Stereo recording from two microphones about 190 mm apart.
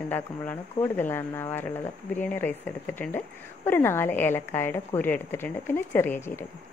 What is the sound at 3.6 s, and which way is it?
A woman's voice, 10° left (ahead or behind).